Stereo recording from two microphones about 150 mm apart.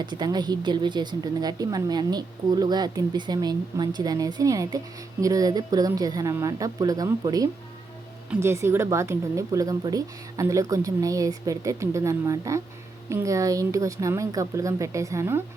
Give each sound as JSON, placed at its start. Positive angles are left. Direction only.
{"t": 0.0, "sound": "a woman's voice", "side_deg": -30}